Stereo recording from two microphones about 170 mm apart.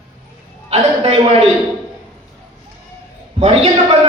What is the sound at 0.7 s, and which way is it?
Speech, 35° right (ahead or behind).